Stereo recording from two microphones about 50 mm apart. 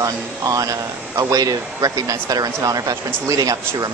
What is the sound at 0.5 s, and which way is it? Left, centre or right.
Speech, right.